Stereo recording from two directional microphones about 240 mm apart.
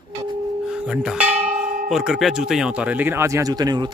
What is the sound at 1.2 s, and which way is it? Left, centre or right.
Church bell, right.